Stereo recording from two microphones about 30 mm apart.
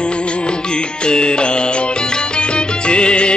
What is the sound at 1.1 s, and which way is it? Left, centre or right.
Music, left.